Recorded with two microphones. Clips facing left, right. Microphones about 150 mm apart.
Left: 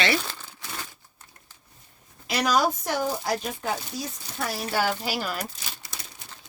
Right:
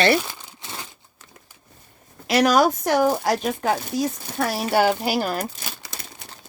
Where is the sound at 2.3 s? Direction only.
80° right.